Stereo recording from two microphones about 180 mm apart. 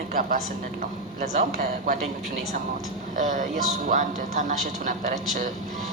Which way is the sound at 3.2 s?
45° right (ahead or behind).